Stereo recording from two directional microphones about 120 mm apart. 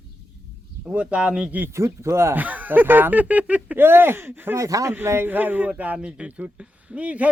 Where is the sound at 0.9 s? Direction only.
10° right (ahead or behind).